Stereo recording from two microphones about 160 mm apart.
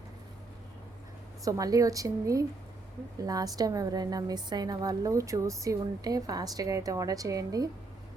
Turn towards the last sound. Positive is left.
turn(degrees=-20)  # may be behind; listen again after turning